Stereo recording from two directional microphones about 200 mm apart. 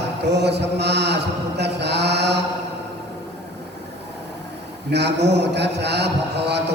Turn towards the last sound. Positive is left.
turn(degrees=-55)  # may be behind; listen again after turning